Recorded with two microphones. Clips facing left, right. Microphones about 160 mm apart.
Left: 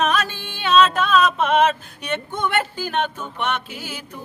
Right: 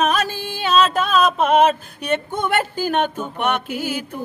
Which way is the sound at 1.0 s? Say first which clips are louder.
Right 1 dB; 40° right (ahead or behind).